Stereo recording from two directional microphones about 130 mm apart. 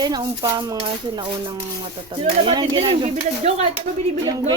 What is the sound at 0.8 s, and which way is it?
Speech, 40° right (ahead or behind).